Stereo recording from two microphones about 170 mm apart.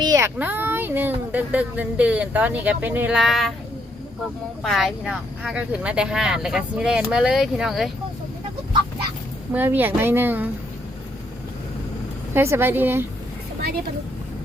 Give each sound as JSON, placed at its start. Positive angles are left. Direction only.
{"t": 0.0, "sound": "a sound", "side_deg": -20}
{"t": 0.3, "sound": "speech", "side_deg": -10}
{"t": 4.6, "sound": "speech", "side_deg": 0}
{"t": 9.5, "sound": "speech", "side_deg": -10}
{"t": 12.3, "sound": "speech", "side_deg": -15}